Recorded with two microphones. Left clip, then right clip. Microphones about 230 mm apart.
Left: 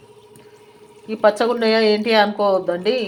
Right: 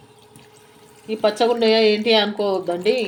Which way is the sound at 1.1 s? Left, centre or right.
Centre.